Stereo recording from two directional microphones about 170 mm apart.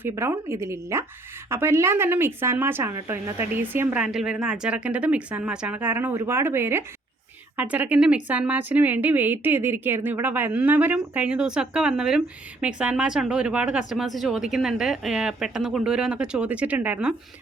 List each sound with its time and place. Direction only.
0.0 s a woman's voice: 15° right (ahead or behind)